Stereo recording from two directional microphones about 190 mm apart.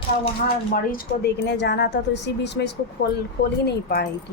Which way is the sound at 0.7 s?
50° left (ahead or behind).